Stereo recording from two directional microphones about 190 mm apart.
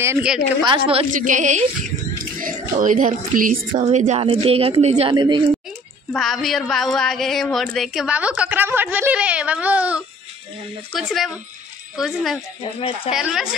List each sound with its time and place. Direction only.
0.0 s a woman's voice: 15° right (ahead or behind)
0.7 s a woman's voice: 30° right (ahead or behind)
1.1 s speech: 40° right (ahead or behind)
5.1 s a woman's voice: 20° right (ahead or behind)
6.1 s speech: centre (ahead or behind)